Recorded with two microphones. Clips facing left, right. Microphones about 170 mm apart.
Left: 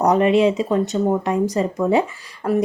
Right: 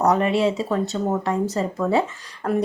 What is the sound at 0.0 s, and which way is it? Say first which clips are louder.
Speech: left 4 dB; 20° left (ahead or behind).